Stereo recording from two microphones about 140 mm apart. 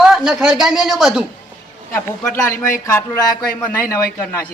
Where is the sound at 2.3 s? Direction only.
20° left (ahead or behind).